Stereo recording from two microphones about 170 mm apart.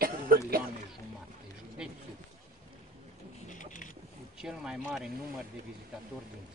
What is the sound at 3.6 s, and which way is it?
Vehicle, 50° left (ahead or behind).